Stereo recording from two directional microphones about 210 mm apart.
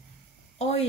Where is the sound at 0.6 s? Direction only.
30° left (ahead or behind).